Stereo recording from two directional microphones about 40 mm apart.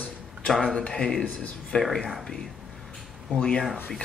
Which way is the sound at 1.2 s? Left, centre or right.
Left.